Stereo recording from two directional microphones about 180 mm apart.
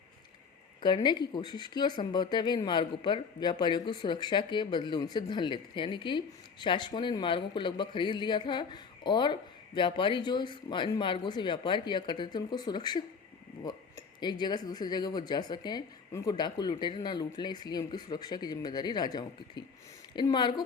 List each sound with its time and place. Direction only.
0.8 s speech: 25° left (ahead or behind)
14.2 s speech: 25° left (ahead or behind)